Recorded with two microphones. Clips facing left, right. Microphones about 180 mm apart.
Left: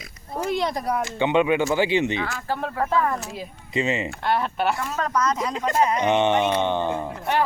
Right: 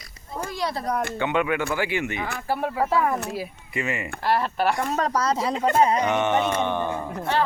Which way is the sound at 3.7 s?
25° left (ahead or behind).